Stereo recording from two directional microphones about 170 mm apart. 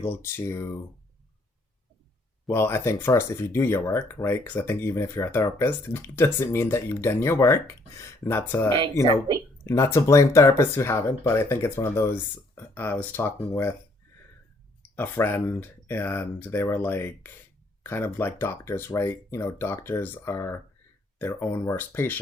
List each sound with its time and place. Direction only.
0.0 s speech: 15° left (ahead or behind)
2.5 s speech: 15° left (ahead or behind)
14.8 s speech: 10° left (ahead or behind)